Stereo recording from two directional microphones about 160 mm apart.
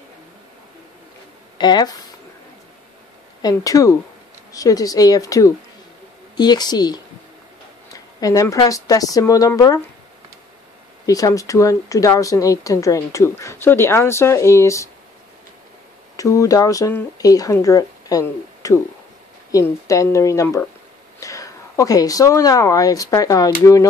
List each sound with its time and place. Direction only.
1.6 s speech: 25° left (ahead or behind)
3.4 s speech: 20° left (ahead or behind)
11.1 s speech: 20° left (ahead or behind)
16.2 s speech: 20° left (ahead or behind)